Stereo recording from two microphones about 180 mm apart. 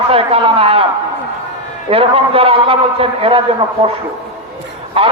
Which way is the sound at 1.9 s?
30° right (ahead or behind).